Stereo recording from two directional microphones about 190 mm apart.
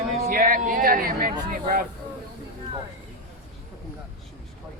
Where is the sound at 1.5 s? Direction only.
50° right (ahead or behind).